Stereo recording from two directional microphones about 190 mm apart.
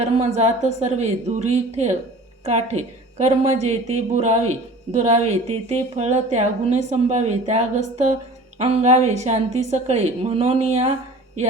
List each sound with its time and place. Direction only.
0.0 s a woman's voice: 35° right (ahead or behind)